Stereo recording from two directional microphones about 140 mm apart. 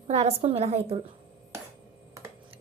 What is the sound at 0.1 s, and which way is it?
Speech, 50° right (ahead or behind).